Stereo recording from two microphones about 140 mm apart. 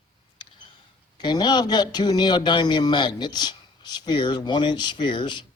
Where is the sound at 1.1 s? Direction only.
30° left (ahead or behind).